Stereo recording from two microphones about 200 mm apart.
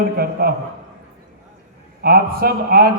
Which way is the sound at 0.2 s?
50° right (ahead or behind).